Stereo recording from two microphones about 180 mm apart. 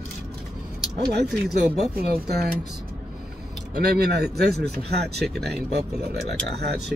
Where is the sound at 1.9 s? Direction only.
60° right (ahead or behind).